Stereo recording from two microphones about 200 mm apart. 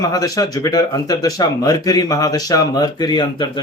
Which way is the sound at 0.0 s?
20° left (ahead or behind).